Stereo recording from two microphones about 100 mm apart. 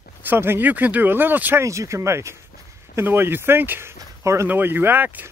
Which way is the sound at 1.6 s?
30° right (ahead or behind).